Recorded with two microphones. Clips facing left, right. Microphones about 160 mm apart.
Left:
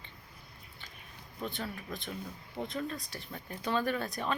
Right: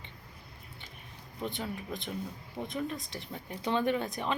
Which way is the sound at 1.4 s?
20° right (ahead or behind).